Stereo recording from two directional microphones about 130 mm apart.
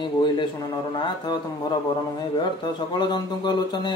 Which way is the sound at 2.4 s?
35° left (ahead or behind).